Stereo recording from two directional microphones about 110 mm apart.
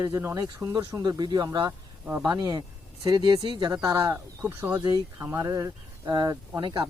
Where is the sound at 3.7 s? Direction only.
35° right (ahead or behind).